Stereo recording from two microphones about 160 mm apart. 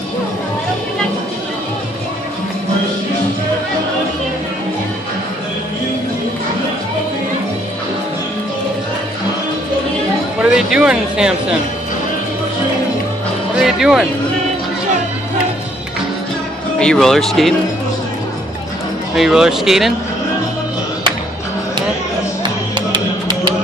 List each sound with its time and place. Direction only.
10.4 s speech: 5° right (ahead or behind)
13.6 s speech: 5° right (ahead or behind)
16.7 s speech: 5° left (ahead or behind)
19.1 s speech: 5° right (ahead or behind)
22.4 s music: 30° right (ahead or behind)